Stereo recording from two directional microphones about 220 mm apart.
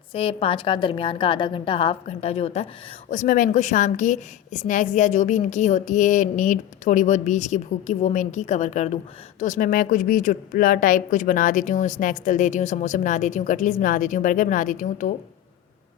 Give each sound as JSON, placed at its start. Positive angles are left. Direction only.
{"t": 0.1, "sound": "a woman's voice", "side_deg": 25}